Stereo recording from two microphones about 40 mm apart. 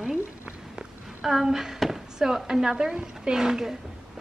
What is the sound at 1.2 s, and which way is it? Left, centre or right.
A woman's voice, centre.